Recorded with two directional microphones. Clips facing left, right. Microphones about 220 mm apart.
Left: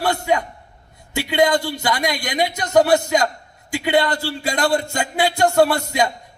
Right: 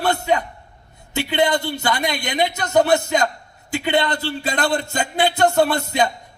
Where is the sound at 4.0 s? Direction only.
20° right (ahead or behind).